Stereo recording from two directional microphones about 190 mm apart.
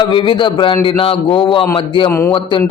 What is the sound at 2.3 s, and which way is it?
Speech, 25° left (ahead or behind).